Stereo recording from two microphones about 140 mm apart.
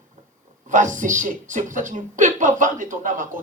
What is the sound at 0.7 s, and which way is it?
Speech, 65° right (ahead or behind).